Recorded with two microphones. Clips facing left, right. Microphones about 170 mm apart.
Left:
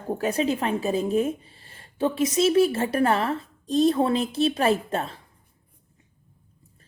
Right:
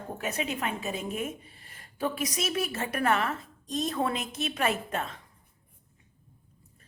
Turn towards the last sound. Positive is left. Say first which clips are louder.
# left 6 dB
turn(degrees=35)  # may be behind; listen again after turning